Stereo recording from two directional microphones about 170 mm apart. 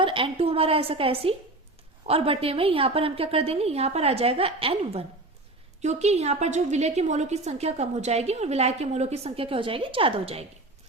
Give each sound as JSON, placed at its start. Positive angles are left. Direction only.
{"t": 0.0, "sound": "a woman's voice", "side_deg": -30}